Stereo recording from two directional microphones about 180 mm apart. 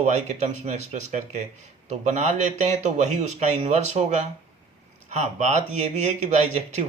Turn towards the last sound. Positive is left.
turn(degrees=-40)  # may be behind; listen again after turning